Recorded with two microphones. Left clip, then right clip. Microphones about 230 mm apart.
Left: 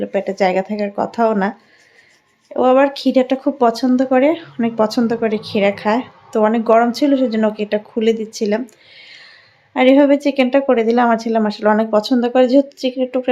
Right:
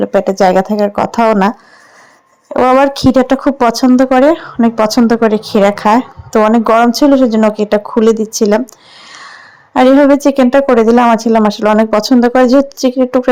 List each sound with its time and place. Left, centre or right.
0.0 s speech: right
9.0 s a sound: right
10.2 s speech: right